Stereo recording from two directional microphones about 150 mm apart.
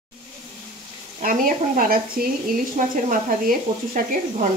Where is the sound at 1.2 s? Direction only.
70° right (ahead or behind).